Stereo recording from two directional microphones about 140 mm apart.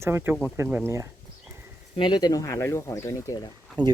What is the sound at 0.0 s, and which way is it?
Speech, 20° right (ahead or behind).